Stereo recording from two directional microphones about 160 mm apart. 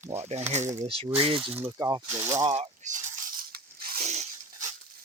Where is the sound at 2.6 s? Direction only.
50° right (ahead or behind).